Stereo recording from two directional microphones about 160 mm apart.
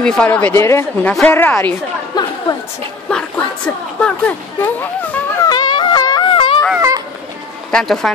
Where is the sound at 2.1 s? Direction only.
25° left (ahead or behind).